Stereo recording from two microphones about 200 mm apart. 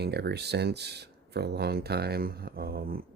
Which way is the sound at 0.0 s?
55° right (ahead or behind).